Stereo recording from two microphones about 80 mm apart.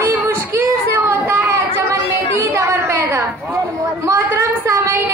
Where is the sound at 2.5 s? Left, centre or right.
Right.